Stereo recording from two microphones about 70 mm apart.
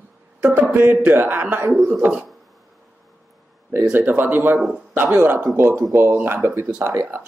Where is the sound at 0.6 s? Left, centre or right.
Right.